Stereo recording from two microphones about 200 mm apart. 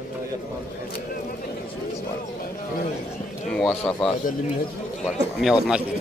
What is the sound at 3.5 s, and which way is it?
A man's voice, centre (ahead or behind).